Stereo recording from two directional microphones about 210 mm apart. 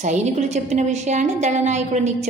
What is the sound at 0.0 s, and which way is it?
A woman's voice, 35° right (ahead or behind).